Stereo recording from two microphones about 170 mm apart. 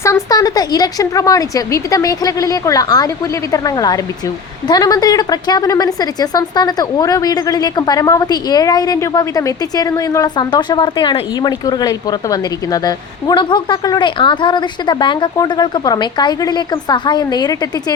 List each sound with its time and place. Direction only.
0.0 s a woman's voice: 20° left (ahead or behind)